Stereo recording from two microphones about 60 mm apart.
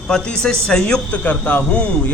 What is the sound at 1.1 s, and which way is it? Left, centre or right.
Speech, left.